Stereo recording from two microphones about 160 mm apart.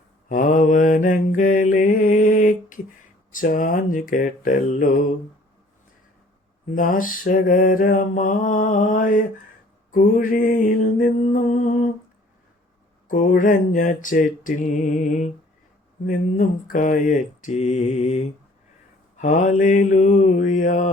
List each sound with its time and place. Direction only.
0.3 s mantra: 55° left (ahead or behind)
6.7 s mantra: 60° left (ahead or behind)
13.1 s mantra: 55° left (ahead or behind)